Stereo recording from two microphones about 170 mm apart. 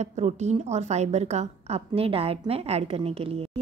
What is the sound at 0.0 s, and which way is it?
A woman's voice, 40° right (ahead or behind).